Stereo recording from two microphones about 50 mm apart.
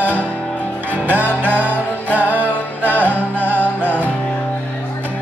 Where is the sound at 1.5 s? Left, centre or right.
Right.